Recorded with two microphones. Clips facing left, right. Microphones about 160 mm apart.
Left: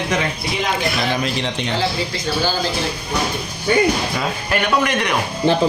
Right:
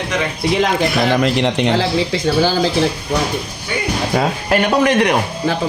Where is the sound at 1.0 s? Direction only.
70° right (ahead or behind).